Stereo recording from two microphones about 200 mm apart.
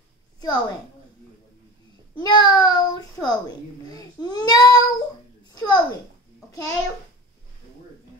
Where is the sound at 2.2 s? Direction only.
20° left (ahead or behind).